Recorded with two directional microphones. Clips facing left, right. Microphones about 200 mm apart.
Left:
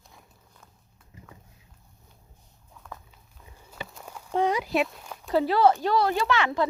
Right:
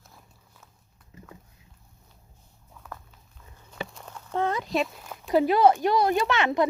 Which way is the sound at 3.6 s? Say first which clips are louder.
Right 3 dB; 5° left (ahead or behind).